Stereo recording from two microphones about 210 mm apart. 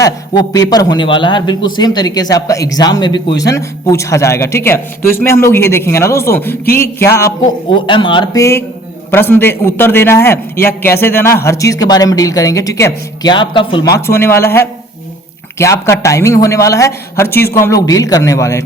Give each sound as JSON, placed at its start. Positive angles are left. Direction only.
{"t": 0.0, "sound": "a man's voice", "side_deg": 15}
{"t": 14.1, "sound": "a man's voice", "side_deg": 10}